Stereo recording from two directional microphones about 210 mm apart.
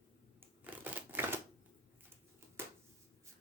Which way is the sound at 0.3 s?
10° right (ahead or behind).